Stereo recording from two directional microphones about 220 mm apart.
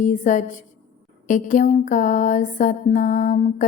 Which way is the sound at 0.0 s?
35° left (ahead or behind).